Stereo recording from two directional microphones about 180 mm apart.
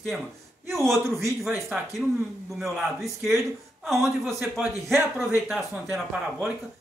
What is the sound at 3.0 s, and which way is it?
A man's voice, 15° right (ahead or behind).